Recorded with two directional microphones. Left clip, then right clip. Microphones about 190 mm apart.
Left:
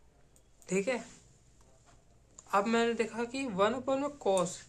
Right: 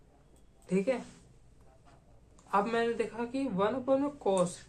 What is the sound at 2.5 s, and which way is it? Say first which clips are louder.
Speech: even; 20° left (ahead or behind).